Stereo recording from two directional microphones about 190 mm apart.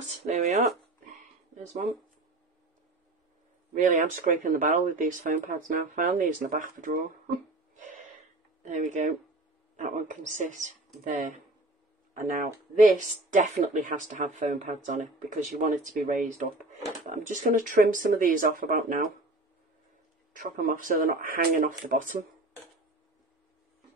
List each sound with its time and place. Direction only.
0.0 s speech: 40° right (ahead or behind)
3.7 s speech: 45° right (ahead or behind)
8.6 s speech: 40° right (ahead or behind)
20.3 s speech: 50° right (ahead or behind)